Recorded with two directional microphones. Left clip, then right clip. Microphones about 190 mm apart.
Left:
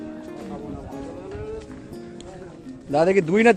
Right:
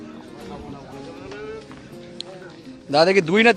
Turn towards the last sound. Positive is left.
turn(degrees=-5)  # may be behind; listen again after turning